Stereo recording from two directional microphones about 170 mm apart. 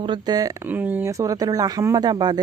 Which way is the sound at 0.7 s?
10° right (ahead or behind).